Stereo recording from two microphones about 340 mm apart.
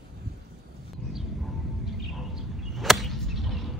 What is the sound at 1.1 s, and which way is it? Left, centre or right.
Arrow, centre.